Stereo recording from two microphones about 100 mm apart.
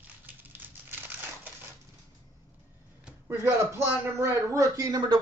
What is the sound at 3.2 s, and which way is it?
Speech, 25° right (ahead or behind).